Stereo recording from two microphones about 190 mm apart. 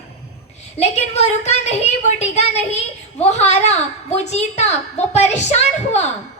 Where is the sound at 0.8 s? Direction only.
35° left (ahead or behind).